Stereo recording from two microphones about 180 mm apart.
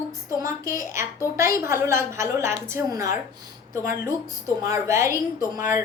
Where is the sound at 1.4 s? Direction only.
15° right (ahead or behind).